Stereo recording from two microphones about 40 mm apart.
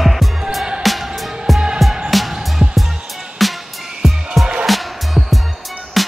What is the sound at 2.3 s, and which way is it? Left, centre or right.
Music, right.